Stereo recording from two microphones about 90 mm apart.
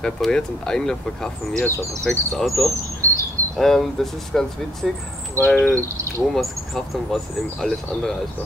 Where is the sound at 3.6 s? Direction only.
5° left (ahead or behind).